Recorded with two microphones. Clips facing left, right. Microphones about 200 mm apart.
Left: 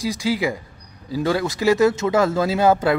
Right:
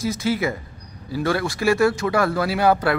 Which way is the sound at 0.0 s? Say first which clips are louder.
Even; 15° left (ahead or behind).